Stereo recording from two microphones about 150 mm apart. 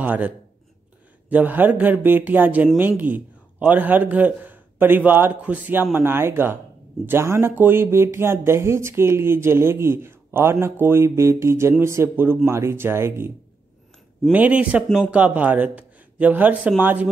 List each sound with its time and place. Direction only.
0.0 s speech: 10° right (ahead or behind)
1.3 s a man's voice: 10° right (ahead or behind)
14.3 s speech: 10° right (ahead or behind)